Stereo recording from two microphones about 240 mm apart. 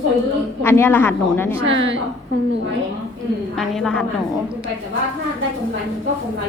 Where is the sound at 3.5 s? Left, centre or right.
Centre.